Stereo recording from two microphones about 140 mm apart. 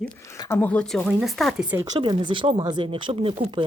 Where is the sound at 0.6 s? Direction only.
10° left (ahead or behind).